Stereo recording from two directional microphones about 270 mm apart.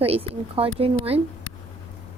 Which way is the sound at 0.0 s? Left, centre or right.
Right.